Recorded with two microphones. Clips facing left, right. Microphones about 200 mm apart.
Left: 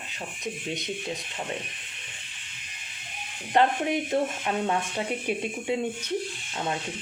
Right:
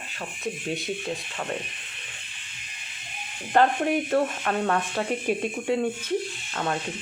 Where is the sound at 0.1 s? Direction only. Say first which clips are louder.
Right 3 dB; 20° left (ahead or behind).